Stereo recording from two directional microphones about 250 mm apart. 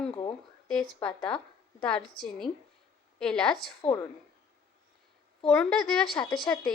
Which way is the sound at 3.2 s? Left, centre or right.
Centre.